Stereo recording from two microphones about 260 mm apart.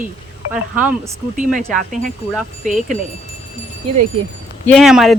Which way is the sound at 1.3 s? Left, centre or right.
Right.